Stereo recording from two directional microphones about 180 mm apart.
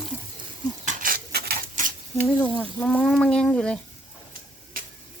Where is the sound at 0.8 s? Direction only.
50° right (ahead or behind).